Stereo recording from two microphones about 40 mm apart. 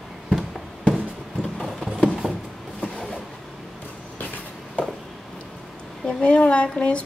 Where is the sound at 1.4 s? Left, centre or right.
Centre.